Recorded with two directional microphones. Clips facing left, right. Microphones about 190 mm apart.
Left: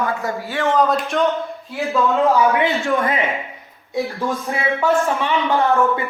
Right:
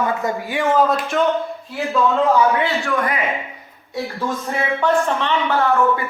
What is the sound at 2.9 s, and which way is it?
Speech, 30° left (ahead or behind).